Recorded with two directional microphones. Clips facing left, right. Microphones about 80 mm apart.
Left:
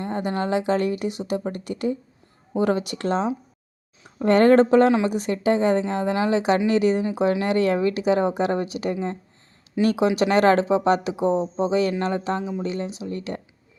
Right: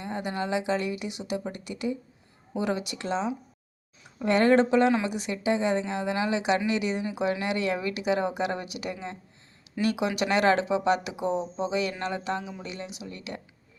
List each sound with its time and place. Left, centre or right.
0.0 s speech: left